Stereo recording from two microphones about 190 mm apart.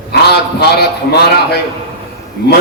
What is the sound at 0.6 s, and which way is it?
Speech, 60° left (ahead or behind).